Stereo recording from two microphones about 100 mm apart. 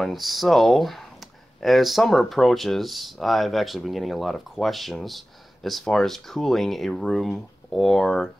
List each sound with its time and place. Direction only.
0.0 s speech: centre (ahead or behind)